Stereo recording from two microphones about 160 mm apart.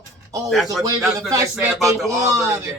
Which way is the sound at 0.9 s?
20° right (ahead or behind).